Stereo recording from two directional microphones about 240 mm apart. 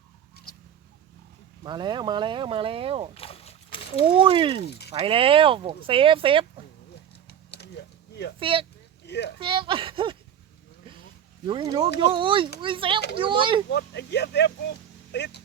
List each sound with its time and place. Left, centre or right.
1.6 s speech: centre
3.2 s a sound: left
4.0 s speech: right
7.3 s a sound: left
8.4 s speech: right
9.0 s speech: left
9.4 s speech: right
11.4 s speech: centre
13.7 s speech: left